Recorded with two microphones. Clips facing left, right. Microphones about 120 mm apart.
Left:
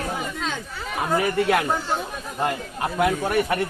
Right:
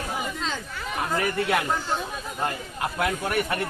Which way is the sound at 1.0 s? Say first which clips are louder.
Left 5 dB; 15° left (ahead or behind).